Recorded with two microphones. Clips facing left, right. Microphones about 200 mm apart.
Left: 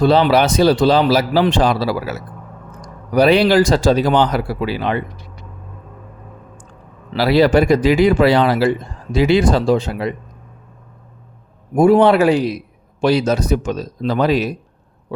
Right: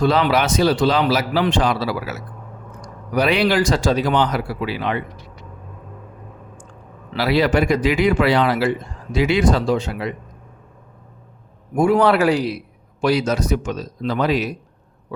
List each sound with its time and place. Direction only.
0.0 s a man's voice: 30° left (ahead or behind)
7.1 s a man's voice: 35° left (ahead or behind)
11.7 s a man's voice: 40° left (ahead or behind)
11.9 s a man's voice: 25° left (ahead or behind)